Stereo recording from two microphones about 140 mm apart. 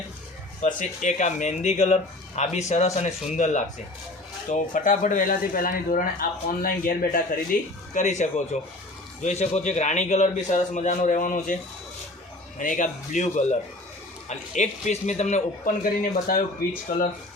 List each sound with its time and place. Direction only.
0.6 s speech: 60° left (ahead or behind); by 7.3 s 90° left
7.9 s speech: 55° left (ahead or behind)
12.5 s speech: 70° left (ahead or behind); by 16.4 s 90° left